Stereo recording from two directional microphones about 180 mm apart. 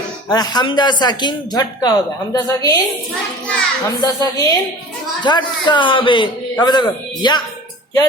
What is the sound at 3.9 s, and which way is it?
Speech, 20° left (ahead or behind).